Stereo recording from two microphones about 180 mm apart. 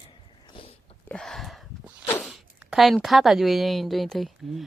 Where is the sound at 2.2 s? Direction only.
Centre (ahead or behind).